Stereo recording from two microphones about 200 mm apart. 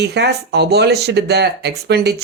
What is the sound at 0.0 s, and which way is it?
Speech, 55° right (ahead or behind).